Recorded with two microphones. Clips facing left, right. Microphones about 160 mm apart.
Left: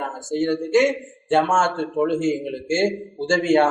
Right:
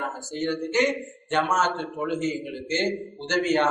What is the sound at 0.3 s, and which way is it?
Speech, 45° left (ahead or behind).